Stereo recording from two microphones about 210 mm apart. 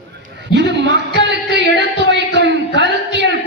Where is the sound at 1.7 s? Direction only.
55° right (ahead or behind).